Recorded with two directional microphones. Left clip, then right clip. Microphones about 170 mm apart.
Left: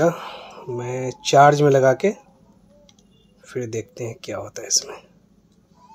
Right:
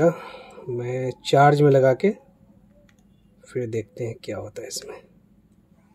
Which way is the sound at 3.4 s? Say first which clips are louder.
Even; 30° right (ahead or behind).